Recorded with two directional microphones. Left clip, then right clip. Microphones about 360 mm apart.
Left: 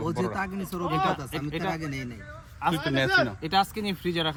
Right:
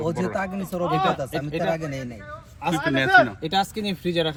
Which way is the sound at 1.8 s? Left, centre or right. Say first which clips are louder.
Right 4 dB; centre.